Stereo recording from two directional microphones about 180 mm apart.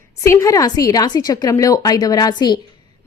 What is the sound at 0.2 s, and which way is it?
A woman's voice, 15° left (ahead or behind).